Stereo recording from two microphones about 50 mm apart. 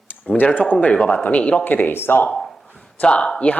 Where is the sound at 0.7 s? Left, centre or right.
Left.